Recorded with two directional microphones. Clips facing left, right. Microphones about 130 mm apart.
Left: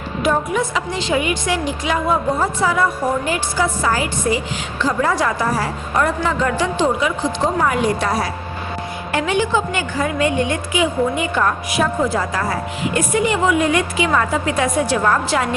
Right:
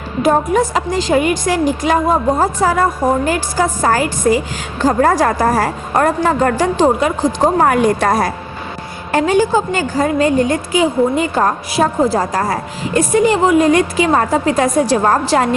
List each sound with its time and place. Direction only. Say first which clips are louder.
0.2 s a woman's voice: right 5 dB; 40° right (ahead or behind)